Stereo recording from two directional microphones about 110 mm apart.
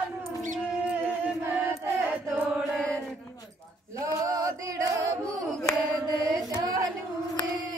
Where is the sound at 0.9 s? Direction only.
15° right (ahead or behind).